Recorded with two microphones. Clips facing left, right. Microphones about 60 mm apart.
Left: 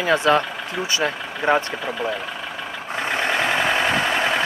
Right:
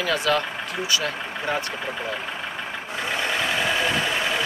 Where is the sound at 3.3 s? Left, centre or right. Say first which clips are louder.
Left 4 dB; left.